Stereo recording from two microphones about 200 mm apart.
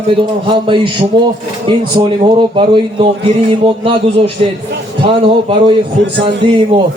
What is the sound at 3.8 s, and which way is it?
A man's voice, 30° right (ahead or behind).